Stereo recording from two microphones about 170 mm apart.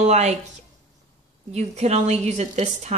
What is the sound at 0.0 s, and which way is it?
Speech, 40° right (ahead or behind).